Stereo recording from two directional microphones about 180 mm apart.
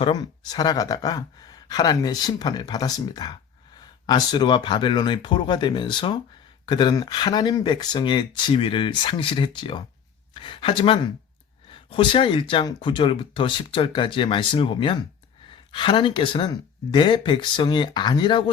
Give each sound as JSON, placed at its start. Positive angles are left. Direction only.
{"t": 0.0, "sound": "speech", "side_deg": 25}